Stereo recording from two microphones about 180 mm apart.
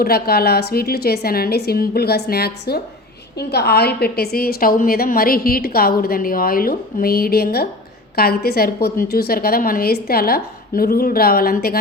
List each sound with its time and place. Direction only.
0.0 s a woman's voice: 60° left (ahead or behind)